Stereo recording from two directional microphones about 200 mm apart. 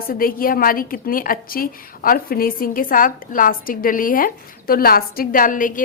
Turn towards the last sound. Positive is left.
turn(degrees=40)  # may be behind; listen again after turning